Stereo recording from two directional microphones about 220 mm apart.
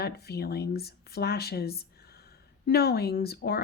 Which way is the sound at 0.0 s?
45° left (ahead or behind).